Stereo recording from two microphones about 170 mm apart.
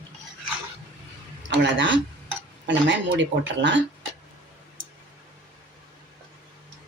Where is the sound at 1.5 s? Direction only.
90° right.